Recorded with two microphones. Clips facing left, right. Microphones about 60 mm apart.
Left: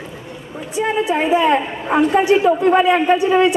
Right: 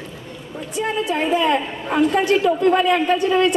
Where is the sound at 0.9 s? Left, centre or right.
Left.